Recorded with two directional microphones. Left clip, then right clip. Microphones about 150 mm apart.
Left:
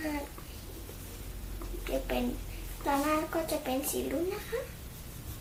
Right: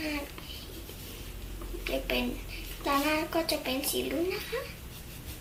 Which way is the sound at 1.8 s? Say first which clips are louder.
Right 2 dB; 5° right (ahead or behind).